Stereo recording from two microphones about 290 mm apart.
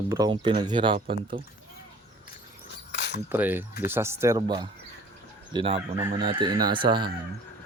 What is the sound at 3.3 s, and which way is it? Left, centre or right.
Speech, centre.